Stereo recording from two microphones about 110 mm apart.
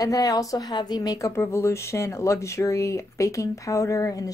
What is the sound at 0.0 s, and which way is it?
A woman's voice, 35° left (ahead or behind).